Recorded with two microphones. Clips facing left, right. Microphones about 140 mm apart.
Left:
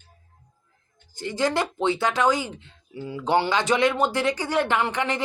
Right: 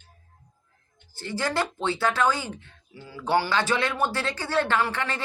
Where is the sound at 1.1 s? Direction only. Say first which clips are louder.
Left 4 dB; 20° left (ahead or behind).